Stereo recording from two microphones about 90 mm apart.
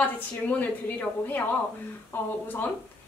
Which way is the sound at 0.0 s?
20° left (ahead or behind).